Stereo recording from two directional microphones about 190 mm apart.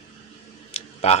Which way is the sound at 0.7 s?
35° left (ahead or behind).